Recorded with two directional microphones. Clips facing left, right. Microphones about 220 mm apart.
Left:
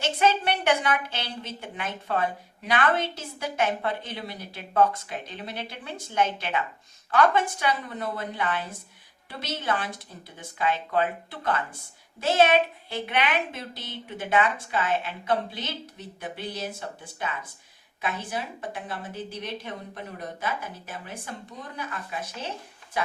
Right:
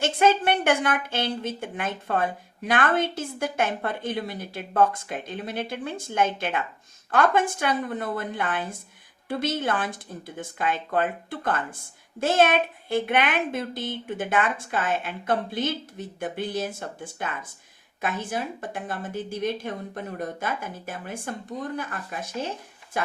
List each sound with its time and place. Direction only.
0.0 s a woman's voice: 50° right (ahead or behind)